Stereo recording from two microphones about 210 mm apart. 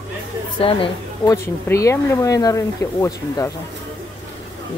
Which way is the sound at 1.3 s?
15° left (ahead or behind).